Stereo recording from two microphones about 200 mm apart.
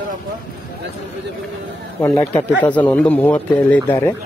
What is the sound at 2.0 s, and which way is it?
Speech, 10° left (ahead or behind).